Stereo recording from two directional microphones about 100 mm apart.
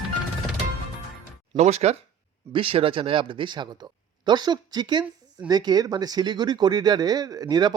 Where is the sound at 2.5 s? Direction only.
65° right (ahead or behind).